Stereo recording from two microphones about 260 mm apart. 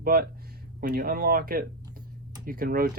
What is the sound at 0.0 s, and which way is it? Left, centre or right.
Speech, right.